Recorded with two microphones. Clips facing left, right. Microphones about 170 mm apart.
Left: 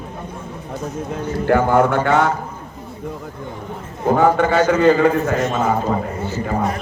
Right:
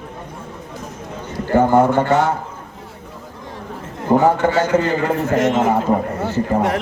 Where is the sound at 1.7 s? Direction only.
60° left (ahead or behind).